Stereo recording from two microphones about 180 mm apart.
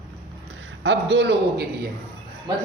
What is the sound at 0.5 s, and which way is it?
A man's voice, 90° right.